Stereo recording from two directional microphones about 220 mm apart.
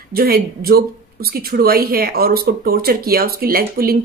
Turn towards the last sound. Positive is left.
turn(degrees=-40)  # may be behind; listen again after turning